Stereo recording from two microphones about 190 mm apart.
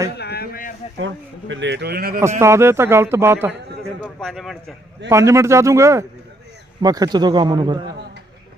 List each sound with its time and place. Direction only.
0.2 s a sound: 55° left (ahead or behind)
0.9 s speech: 80° right; by 2.2 s 50° right (ahead or behind)
2.4 s speech: 15° right (ahead or behind)
4.0 s speech: centre (ahead or behind)
5.0 s a man's voice: 15° right (ahead or behind)